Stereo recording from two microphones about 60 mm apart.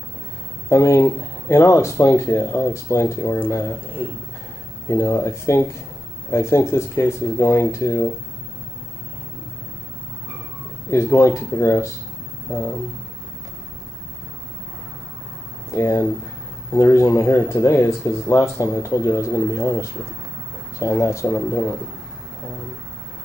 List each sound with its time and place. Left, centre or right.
0.7 s speech: left
3.8 s speech: right
4.8 s speech: left
10.9 s speech: left
12.4 s a sound: left
15.7 s speech: left
21.0 s speech: left